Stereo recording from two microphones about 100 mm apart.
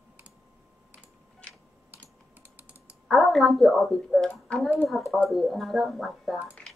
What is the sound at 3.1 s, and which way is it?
A woman's voice, centre (ahead or behind).